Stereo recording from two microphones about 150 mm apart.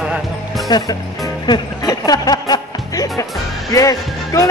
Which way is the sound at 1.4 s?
25° left (ahead or behind).